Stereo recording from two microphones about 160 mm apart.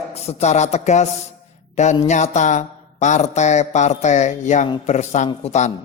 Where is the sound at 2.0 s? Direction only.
45° left (ahead or behind).